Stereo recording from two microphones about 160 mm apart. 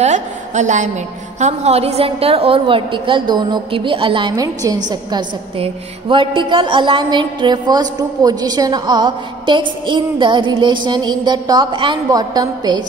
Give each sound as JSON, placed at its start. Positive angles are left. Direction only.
{"t": 0.0, "sound": "a woman's voice", "side_deg": -45}